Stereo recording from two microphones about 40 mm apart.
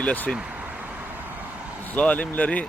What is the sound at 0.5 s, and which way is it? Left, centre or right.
Vehicle, right.